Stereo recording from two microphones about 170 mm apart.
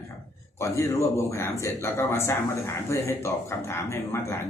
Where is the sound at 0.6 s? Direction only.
15° left (ahead or behind).